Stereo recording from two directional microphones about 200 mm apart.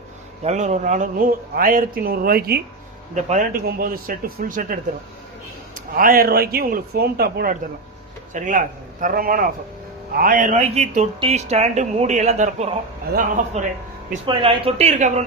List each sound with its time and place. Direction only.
0.4 s speech: 35° right (ahead or behind)
3.2 s speech: 40° right (ahead or behind)
8.3 s speech: 40° right (ahead or behind)
14.3 s speech: 25° right (ahead or behind)